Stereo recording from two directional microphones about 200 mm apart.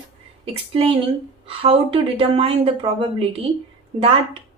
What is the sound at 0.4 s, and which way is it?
A woman's voice, 30° right (ahead or behind).